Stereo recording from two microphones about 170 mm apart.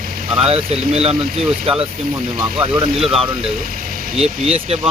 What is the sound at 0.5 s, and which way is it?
Speech, 35° right (ahead or behind).